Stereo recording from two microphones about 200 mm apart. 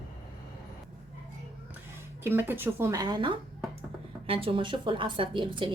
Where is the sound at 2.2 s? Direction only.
10° right (ahead or behind).